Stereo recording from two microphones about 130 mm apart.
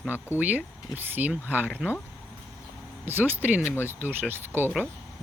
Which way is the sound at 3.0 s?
15° right (ahead or behind).